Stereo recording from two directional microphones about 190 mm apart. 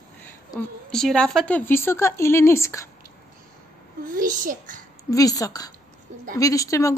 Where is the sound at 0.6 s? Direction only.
5° left (ahead or behind).